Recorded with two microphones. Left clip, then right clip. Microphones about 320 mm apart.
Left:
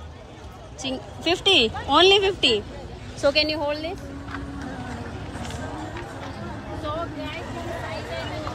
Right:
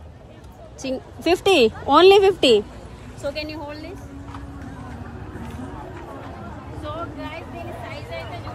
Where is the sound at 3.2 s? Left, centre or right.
Left.